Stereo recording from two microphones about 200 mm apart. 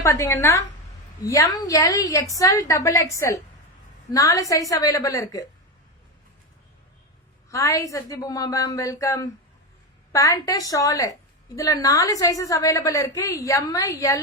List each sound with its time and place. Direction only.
0.0 s a woman's voice: 15° left (ahead or behind)
7.5 s a woman's voice: 15° left (ahead or behind)